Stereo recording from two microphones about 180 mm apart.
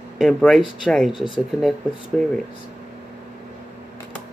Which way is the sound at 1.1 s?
25° left (ahead or behind).